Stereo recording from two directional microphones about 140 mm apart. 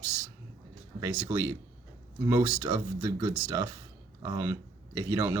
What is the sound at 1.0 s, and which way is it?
Speech, 20° right (ahead or behind).